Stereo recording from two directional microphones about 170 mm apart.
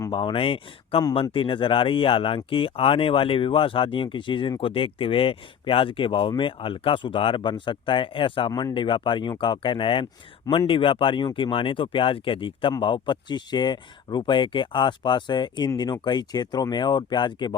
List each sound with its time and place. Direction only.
0.1 s speech: 30° left (ahead or behind)